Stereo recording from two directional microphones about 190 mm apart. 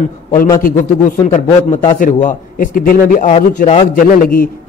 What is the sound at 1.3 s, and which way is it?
Speech, 25° left (ahead or behind).